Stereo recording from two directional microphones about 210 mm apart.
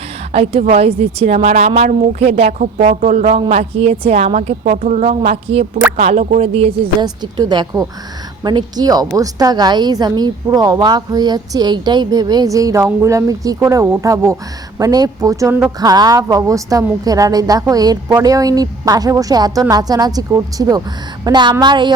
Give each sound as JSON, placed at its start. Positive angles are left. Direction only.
{"t": 0.3, "sound": "a woman's voice", "side_deg": -30}